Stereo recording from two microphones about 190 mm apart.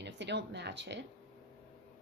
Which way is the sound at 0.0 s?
65° right (ahead or behind).